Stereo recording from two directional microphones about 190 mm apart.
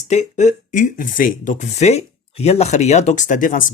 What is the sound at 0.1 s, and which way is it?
Speech, 40° left (ahead or behind).